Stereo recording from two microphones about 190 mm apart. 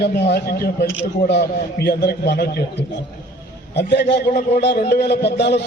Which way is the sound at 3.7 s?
65° left (ahead or behind).